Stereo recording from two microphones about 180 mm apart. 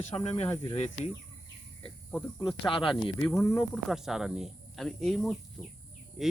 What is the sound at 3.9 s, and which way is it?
Speech, centre (ahead or behind).